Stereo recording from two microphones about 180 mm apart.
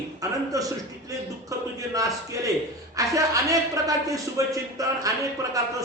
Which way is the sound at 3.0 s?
20° right (ahead or behind).